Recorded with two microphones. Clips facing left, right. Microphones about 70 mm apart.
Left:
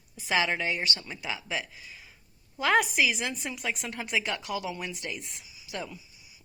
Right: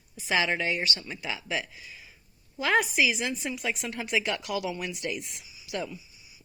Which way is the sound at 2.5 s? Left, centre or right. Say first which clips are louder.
Even; left.